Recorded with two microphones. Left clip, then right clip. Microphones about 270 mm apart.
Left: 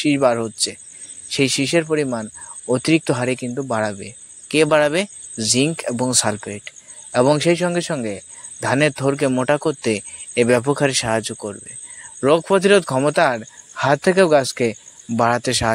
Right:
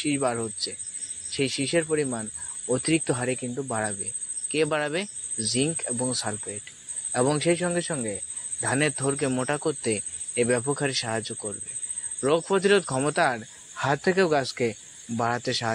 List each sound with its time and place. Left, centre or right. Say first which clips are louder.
0.0 s speech: left 10 dB; left